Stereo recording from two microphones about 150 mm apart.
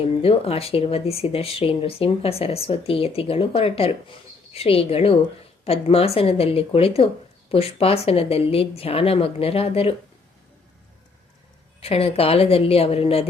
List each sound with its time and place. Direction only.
0.0 s speech: 40° left (ahead or behind)
11.8 s speech: 40° left (ahead or behind)